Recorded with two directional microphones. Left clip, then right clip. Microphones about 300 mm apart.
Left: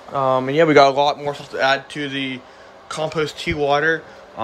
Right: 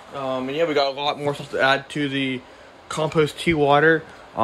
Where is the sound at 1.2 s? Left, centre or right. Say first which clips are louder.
Even; centre.